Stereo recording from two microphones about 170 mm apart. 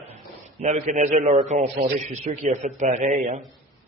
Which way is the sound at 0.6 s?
45° right (ahead or behind).